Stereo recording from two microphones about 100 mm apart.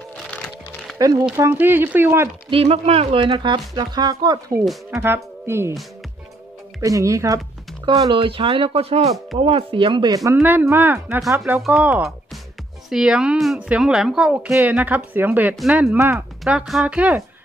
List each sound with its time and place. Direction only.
0.9 s speech: 40° right (ahead or behind)
1.3 s speech: 25° right (ahead or behind)
2.5 s speech: 85° right; by 4.4 s 40° right (ahead or behind)
4.9 s speech: 25° right (ahead or behind)
6.8 s speech: 35° right (ahead or behind)
8.1 s speech: 60° right (ahead or behind); by 9.1 s 85° right
9.4 s speech: 65° right (ahead or behind)
10.4 s speech: 20° right (ahead or behind)
11.8 s speech: 10° right (ahead or behind)